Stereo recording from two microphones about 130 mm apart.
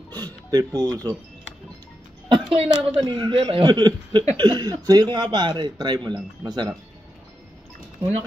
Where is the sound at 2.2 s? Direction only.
45° right (ahead or behind).